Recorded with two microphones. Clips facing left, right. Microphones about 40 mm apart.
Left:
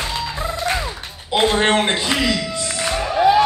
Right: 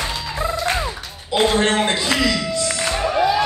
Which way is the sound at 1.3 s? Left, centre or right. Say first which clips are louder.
Left 1 dB; left.